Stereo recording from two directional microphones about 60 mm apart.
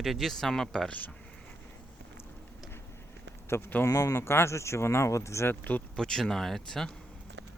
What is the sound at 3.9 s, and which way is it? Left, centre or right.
Speech, left.